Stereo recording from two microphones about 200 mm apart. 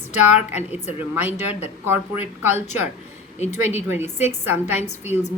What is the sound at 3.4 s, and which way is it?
Speech, 35° left (ahead or behind).